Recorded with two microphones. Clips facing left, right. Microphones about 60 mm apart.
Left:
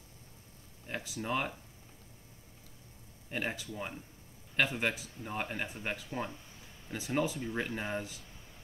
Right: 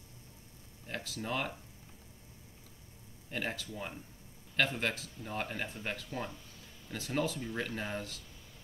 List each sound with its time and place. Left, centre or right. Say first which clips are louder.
0.8 s speech: left 2 dB; centre
3.3 s speech: left 1 dB; centre